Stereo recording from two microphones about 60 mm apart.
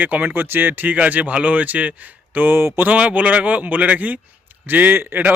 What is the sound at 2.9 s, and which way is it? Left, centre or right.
A man's voice, right.